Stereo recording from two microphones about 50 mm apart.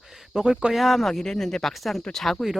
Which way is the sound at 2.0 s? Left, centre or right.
Centre.